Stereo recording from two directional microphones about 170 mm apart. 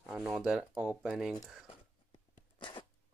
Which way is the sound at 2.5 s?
30° left (ahead or behind).